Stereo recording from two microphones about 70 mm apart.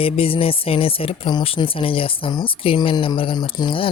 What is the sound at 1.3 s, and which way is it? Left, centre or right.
Speech, left.